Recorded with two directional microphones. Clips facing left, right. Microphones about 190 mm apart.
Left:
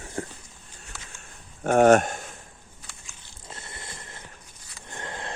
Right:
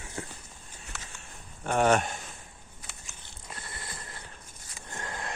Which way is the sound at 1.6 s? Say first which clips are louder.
Left 7 dB; 50° left (ahead or behind).